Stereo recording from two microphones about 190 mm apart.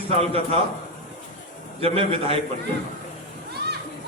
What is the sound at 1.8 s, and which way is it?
Speech, 30° right (ahead or behind).